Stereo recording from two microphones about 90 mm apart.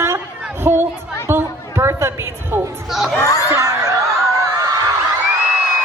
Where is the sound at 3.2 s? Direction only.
35° left (ahead or behind).